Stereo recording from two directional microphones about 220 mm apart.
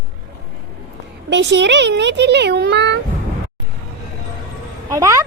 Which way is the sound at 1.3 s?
55° right (ahead or behind).